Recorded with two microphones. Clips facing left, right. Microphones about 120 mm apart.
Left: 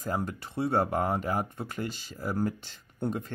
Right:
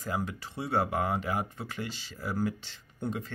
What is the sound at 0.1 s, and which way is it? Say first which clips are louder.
Speech: left 2 dB; 45° left (ahead or behind).